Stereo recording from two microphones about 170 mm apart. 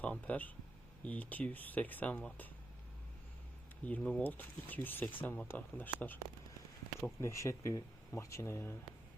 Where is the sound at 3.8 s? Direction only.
10° left (ahead or behind).